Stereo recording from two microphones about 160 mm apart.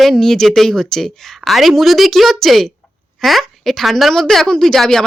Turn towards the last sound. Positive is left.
turn(degrees=5)  # may be behind; listen again after turning